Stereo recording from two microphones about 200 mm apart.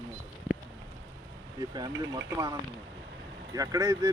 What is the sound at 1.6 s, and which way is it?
Speech, 20° right (ahead or behind).